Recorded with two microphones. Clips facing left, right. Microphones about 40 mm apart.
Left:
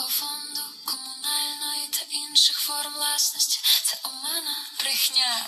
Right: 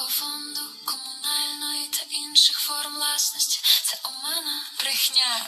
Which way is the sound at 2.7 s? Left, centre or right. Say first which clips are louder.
Right 1 dB; centre.